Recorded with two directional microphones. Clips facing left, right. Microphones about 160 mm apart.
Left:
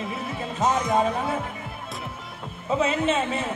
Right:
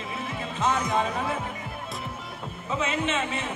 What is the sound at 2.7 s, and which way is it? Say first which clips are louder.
Speech: left 5 dB; 35° left (ahead or behind).